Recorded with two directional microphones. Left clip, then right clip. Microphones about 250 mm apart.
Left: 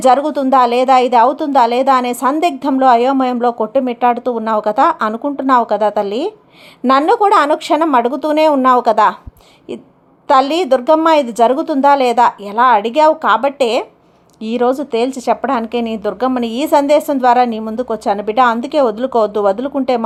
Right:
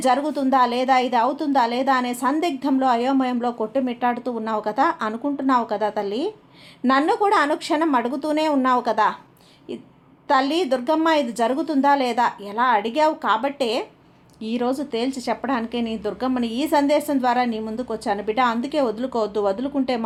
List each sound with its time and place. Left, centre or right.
0.0 s a woman's voice: left
10.2 s a woman's voice: left